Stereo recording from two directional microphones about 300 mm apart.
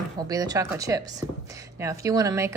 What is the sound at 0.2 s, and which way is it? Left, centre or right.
A woman's voice, centre.